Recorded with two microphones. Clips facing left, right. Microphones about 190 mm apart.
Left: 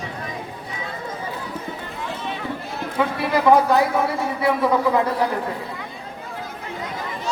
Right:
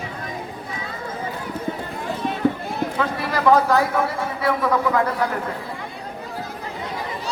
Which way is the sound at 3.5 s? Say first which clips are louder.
Even; 15° left (ahead or behind).